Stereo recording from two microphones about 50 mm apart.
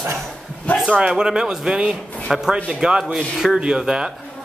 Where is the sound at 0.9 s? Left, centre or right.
Centre.